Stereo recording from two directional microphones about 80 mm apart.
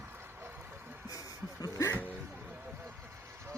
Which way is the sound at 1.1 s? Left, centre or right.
Left.